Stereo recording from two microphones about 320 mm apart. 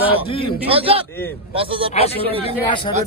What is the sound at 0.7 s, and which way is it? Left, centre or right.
Speech, centre.